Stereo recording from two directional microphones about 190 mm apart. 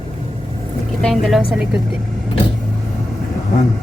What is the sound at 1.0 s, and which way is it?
Speech, centre (ahead or behind).